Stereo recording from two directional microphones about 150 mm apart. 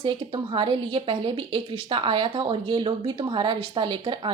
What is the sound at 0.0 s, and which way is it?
A woman's voice, 35° right (ahead or behind).